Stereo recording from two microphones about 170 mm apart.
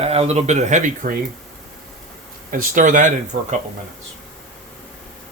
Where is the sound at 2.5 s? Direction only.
50° right (ahead or behind).